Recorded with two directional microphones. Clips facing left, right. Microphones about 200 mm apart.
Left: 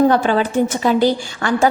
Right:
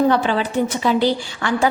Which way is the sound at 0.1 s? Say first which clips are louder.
Left 3 dB; 45° left (ahead or behind).